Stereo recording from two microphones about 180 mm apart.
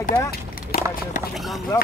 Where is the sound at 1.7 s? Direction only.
20° left (ahead or behind).